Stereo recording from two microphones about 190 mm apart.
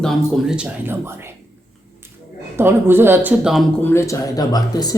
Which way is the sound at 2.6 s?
10° right (ahead or behind).